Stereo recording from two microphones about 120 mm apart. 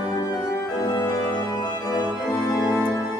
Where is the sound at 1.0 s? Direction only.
20° left (ahead or behind).